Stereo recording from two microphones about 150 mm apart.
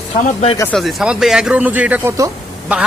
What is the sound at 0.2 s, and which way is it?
Speech, 45° left (ahead or behind).